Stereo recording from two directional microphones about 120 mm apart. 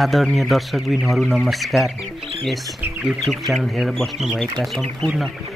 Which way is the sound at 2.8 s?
15° right (ahead or behind).